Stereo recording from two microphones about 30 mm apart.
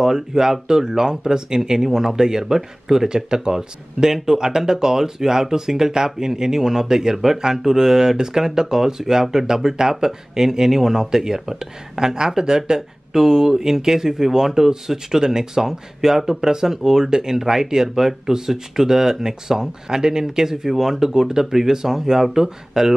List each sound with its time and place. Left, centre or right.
0.0 s speech: centre